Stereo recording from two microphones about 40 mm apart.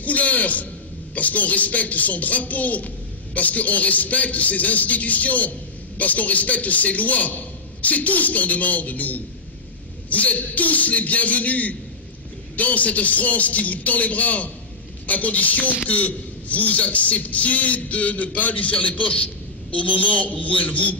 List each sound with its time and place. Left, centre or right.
0.0 s a man's voice: left